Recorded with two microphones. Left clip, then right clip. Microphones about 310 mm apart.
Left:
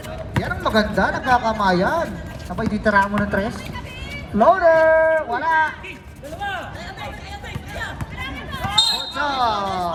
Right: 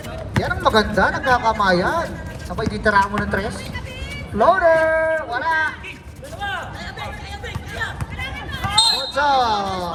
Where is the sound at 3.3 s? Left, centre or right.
Right.